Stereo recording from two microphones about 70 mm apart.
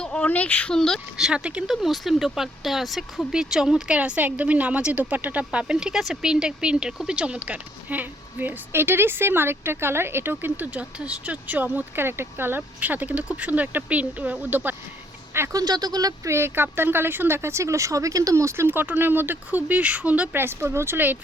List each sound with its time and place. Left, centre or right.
0.0 s a sound: centre
0.3 s speech: left
0.7 s a woman's voice: centre
1.1 s speech: centre; by 14.8 s right
15.5 s speech: right
16.3 s speech: right
20.3 s speech: right